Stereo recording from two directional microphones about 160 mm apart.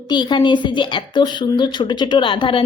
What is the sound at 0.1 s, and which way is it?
A woman's voice, 30° left (ahead or behind).